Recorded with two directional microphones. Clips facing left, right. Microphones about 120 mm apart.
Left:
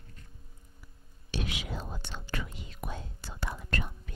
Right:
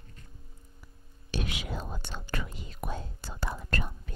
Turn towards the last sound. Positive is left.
turn(degrees=-40)  # may be behind; listen again after turning